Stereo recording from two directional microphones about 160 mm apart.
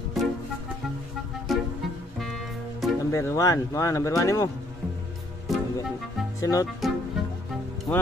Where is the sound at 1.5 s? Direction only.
Centre (ahead or behind).